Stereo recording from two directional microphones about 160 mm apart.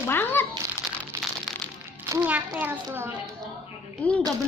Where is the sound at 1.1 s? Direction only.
20° right (ahead or behind).